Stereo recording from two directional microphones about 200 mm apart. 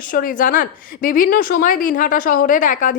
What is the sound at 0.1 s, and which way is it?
A woman's voice, 45° left (ahead or behind).